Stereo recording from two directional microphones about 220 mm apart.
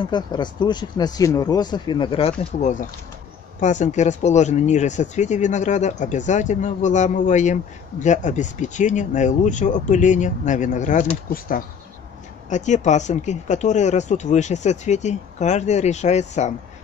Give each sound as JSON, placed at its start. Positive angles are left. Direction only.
{"t": 0.0, "sound": "speech", "side_deg": 20}